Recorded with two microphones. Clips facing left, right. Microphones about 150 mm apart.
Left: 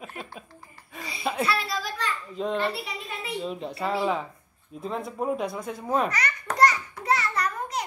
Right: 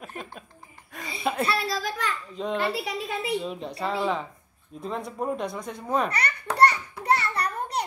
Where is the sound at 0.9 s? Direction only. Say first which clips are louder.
Even; centre (ahead or behind).